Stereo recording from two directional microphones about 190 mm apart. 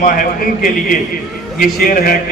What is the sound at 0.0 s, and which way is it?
A man's voice, 45° left (ahead or behind).